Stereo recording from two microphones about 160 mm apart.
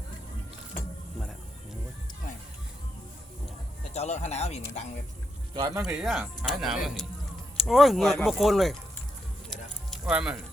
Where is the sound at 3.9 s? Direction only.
45° left (ahead or behind).